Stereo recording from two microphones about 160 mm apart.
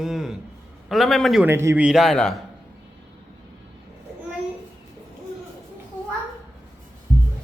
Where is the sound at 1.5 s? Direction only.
15° right (ahead or behind); by 2.4 s centre (ahead or behind).